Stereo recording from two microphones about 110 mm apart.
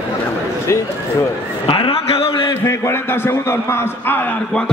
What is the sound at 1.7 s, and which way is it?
Speech, 55° left (ahead or behind).